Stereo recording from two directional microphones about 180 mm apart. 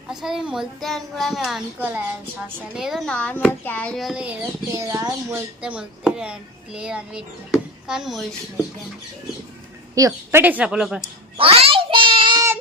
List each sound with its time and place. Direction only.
0.1 s speech: 5° right (ahead or behind)
9.9 s speech: 20° right (ahead or behind); by 11.1 s 5° right (ahead or behind)
11.3 s a sound: 30° right (ahead or behind)